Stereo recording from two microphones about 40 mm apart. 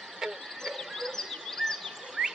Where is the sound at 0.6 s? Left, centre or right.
Centre.